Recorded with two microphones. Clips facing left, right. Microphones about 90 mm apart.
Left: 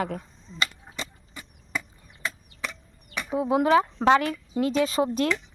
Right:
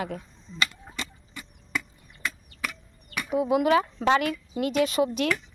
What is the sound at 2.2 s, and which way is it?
Chop, 25° left (ahead or behind).